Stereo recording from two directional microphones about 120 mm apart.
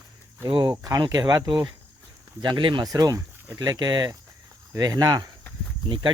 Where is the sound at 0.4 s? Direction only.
35° right (ahead or behind).